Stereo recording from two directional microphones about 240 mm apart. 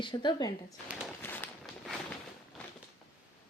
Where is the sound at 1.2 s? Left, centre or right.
Centre.